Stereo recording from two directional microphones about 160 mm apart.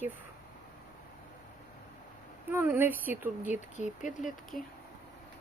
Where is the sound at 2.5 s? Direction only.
10° right (ahead or behind).